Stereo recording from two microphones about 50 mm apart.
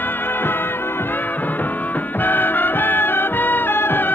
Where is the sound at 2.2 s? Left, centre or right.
Left.